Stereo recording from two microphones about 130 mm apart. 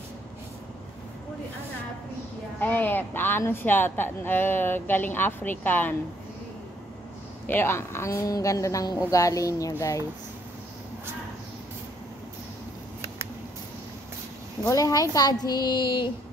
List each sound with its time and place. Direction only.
2.6 s a woman's voice: 15° left (ahead or behind)
7.4 s speech: 15° left (ahead or behind)
14.6 s a woman's voice: 25° left (ahead or behind)